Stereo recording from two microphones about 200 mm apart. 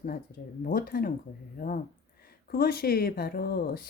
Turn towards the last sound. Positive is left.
turn(degrees=50)  # may be behind; listen again after turning